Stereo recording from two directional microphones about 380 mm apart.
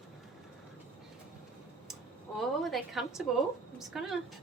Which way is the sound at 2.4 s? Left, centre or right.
Centre.